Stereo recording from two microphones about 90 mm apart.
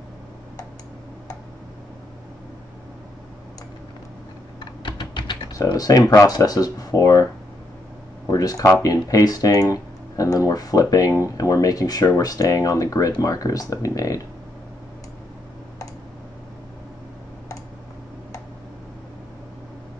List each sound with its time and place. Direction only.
4.8 s typing: 60° left (ahead or behind)
5.5 s speech: 45° left (ahead or behind)
8.3 s speech: 40° left (ahead or behind)